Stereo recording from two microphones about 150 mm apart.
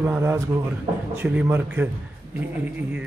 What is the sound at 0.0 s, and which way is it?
A man's voice, 15° right (ahead or behind).